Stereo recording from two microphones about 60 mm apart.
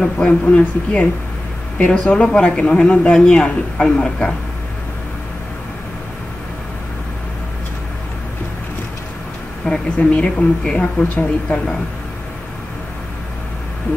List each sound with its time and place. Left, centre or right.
0.0 s a woman's voice: centre
9.7 s speech: centre